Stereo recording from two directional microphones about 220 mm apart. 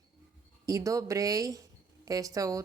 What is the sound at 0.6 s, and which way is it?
Speech, 15° right (ahead or behind).